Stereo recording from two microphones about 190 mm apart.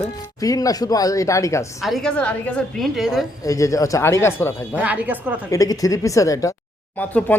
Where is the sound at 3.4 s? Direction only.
15° left (ahead or behind).